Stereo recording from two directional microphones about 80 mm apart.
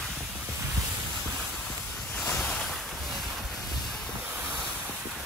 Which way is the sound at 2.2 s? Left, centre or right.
Centre.